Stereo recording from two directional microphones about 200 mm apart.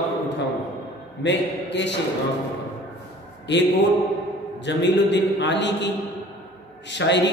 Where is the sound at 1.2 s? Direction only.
60° left (ahead or behind).